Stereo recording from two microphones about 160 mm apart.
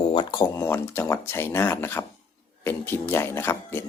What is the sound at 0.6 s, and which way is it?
Speech, 15° left (ahead or behind).